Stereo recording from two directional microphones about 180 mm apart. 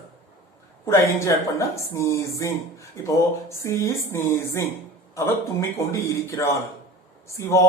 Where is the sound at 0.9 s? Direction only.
15° left (ahead or behind).